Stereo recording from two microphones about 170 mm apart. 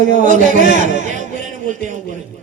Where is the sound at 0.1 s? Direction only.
50° right (ahead or behind).